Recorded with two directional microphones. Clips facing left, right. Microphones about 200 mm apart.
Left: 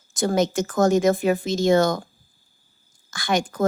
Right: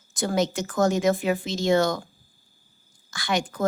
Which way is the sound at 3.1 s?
50° left (ahead or behind).